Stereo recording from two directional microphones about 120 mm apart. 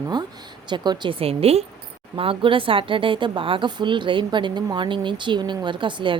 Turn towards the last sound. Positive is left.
turn(degrees=-40)  # may be behind; listen again after turning